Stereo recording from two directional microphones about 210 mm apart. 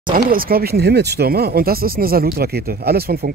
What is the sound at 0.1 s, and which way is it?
Speech, 45° right (ahead or behind).